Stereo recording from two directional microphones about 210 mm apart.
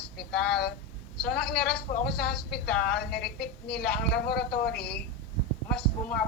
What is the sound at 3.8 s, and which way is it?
Speech, 5° left (ahead or behind).